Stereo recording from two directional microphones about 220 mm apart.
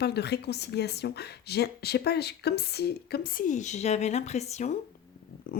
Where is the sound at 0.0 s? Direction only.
50° left (ahead or behind); by 4.7 s 30° left (ahead or behind).